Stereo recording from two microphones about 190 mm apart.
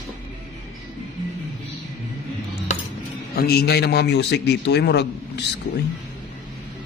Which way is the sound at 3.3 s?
55° left (ahead or behind).